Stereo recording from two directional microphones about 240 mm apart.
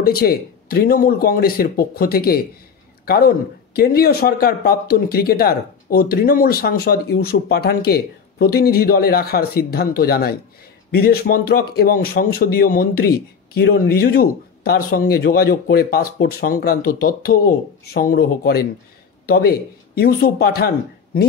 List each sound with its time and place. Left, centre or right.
0.0 s speech: left